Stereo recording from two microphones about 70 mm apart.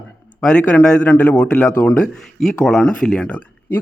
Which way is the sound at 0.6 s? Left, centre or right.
Left.